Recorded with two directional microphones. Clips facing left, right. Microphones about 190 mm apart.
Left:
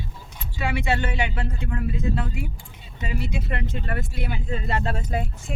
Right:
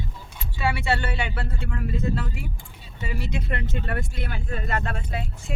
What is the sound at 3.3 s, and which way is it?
Speech, centre (ahead or behind).